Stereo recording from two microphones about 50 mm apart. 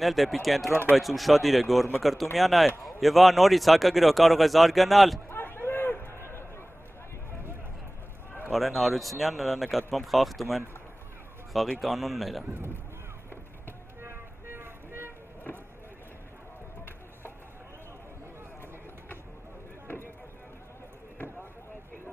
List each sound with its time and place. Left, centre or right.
0.0 s a man's voice: centre
5.3 s a sound: left
8.5 s a man's voice: centre
11.5 s a man's voice: centre
14.0 s vehicle: right